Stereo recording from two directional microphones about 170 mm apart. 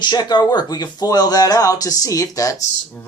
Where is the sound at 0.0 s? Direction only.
25° left (ahead or behind).